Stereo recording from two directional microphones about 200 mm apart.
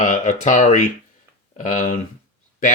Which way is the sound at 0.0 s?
40° left (ahead or behind).